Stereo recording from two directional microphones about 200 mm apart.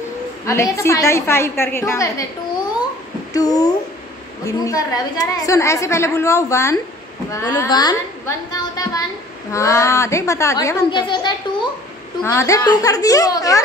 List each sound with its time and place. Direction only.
0.5 s a woman's voice: 15° left (ahead or behind)
3.3 s a woman's voice: 20° left (ahead or behind)